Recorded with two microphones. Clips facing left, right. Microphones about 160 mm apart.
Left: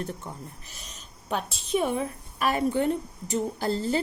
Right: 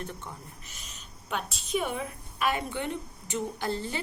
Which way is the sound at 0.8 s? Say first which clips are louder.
Left 2 dB; 35° left (ahead or behind).